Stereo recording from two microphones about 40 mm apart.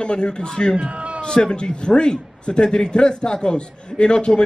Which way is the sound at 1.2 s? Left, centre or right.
Left.